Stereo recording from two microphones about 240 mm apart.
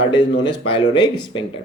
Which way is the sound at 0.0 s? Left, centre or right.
Left.